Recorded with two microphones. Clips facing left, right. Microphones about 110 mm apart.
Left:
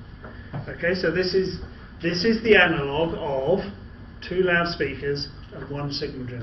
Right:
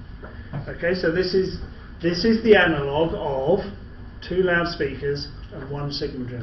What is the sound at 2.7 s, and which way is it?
A man's voice, centre (ahead or behind).